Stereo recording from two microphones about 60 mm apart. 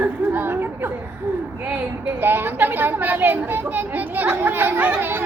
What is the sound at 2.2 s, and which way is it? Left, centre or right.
Speech, right.